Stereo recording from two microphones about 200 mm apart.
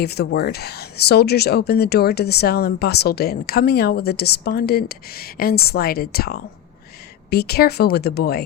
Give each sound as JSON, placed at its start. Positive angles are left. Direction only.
{"t": 0.0, "sound": "speech", "side_deg": 55}